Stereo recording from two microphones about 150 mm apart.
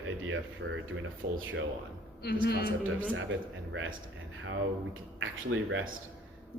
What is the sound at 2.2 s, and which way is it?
Speech, 90° left.